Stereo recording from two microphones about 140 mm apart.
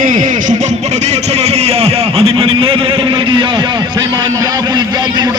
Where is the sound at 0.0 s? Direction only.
65° right (ahead or behind).